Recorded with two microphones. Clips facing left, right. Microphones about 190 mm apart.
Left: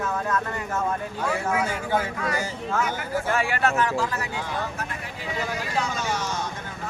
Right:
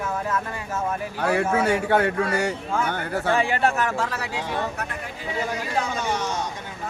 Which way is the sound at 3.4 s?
20° right (ahead or behind).